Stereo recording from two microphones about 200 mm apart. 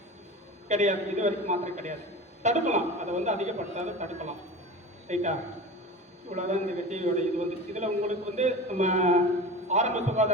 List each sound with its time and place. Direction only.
0.7 s a man's voice: 35° right (ahead or behind)
5.0 s a man's voice: 35° right (ahead or behind)
6.3 s a man's voice: 35° right (ahead or behind)